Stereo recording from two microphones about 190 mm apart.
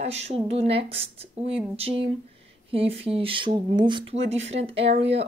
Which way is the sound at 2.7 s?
30° right (ahead or behind).